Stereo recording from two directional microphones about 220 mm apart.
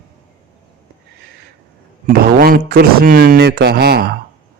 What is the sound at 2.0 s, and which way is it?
Speech, 40° right (ahead or behind).